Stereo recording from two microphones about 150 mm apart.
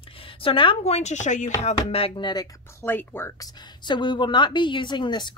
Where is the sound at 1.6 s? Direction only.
40° left (ahead or behind); by 3.5 s 15° left (ahead or behind).